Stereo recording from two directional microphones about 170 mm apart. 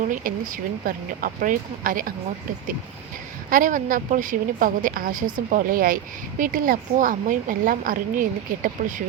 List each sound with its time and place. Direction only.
0.9 s speech: 55° right (ahead or behind)
3.5 s a woman's voice: 50° right (ahead or behind)